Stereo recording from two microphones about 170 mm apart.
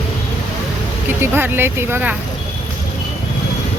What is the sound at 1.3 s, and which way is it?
Speech, 15° right (ahead or behind).